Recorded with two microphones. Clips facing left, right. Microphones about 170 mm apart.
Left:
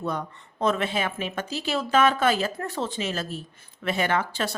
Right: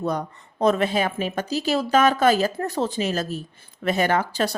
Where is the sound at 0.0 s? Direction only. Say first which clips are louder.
Right 4 dB; 40° right (ahead or behind).